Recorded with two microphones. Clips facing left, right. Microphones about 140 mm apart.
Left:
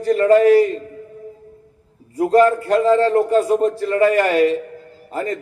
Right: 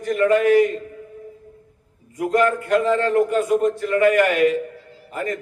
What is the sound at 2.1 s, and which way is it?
A man's voice, 35° left (ahead or behind).